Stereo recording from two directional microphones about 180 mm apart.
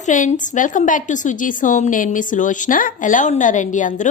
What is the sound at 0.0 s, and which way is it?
A woman's voice, 45° left (ahead or behind).